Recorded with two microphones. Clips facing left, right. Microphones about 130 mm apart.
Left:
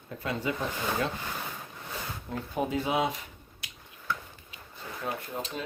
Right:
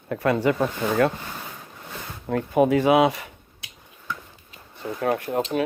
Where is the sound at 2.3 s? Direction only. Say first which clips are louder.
Right 12 dB; 70° right (ahead or behind).